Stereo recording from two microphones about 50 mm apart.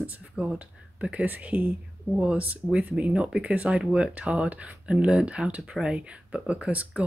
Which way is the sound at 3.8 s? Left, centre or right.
Centre.